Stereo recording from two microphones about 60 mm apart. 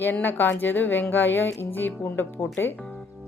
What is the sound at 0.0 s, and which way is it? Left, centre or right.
A woman's voice, left.